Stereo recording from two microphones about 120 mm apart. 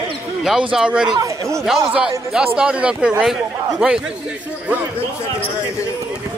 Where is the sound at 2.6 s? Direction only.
10° right (ahead or behind).